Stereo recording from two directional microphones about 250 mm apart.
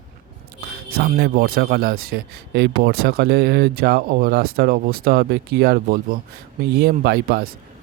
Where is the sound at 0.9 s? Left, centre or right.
Right.